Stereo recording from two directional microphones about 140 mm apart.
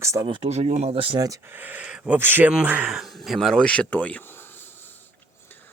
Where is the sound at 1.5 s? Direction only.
10° right (ahead or behind); by 4.2 s 10° left (ahead or behind).